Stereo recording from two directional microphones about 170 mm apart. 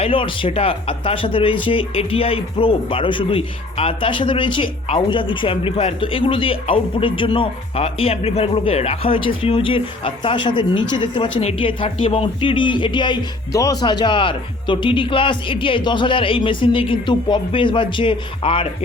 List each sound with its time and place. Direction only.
0.0 s speech: 30° left (ahead or behind)